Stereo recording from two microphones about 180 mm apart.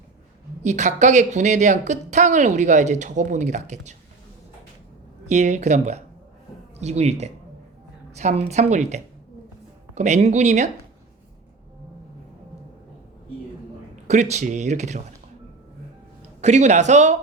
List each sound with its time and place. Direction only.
0.6 s a woman's voice: 40° right (ahead or behind)
5.3 s a woman's voice: 40° right (ahead or behind)
13.9 s a woman's voice: 40° right (ahead or behind)
16.4 s a woman's voice: 40° right (ahead or behind)